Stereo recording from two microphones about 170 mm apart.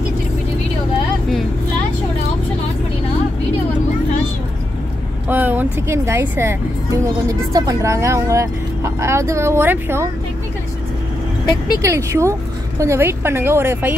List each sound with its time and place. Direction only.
5.3 s speech: 10° right (ahead or behind)
11.4 s speech: 25° left (ahead or behind)
11.8 s speech: 15° right (ahead or behind)